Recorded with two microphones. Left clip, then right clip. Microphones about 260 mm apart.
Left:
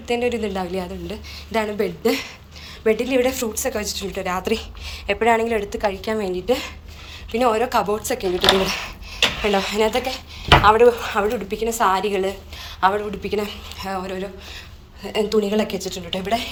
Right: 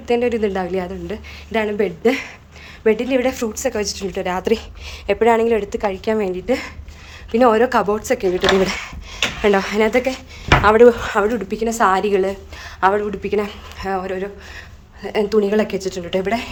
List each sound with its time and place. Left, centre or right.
0.1 s a woman's voice: centre